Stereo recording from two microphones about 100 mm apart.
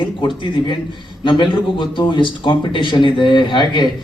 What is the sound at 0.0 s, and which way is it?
A man's voice, 55° left (ahead or behind).